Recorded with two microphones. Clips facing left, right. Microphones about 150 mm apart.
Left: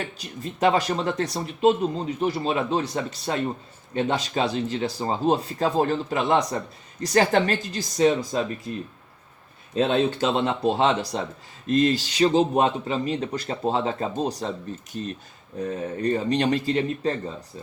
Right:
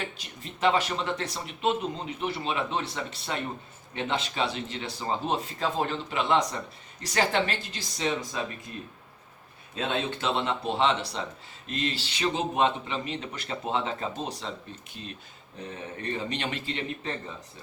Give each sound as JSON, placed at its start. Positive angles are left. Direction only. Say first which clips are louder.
{"t": 0.2, "sound": "speech", "louder": "left 6 dB", "side_deg": 40}
{"t": 9.8, "sound": "speech", "louder": "left 7 dB", "side_deg": 40}